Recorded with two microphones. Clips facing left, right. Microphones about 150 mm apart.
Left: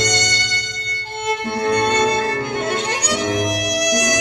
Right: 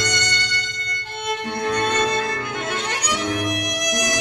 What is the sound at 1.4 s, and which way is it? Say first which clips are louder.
Music: left 4 dB; 40° left (ahead or behind).